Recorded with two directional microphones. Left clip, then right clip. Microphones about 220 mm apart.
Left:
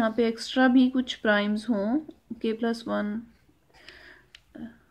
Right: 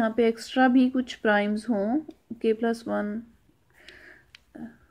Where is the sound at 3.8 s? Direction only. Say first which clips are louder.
Even; 5° right (ahead or behind).